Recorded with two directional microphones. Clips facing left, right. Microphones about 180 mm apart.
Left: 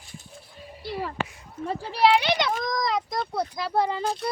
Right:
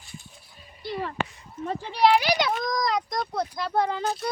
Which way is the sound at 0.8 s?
5° left (ahead or behind).